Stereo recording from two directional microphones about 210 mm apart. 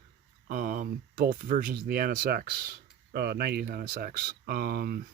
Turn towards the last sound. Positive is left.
turn(degrees=-45)  # may be behind; listen again after turning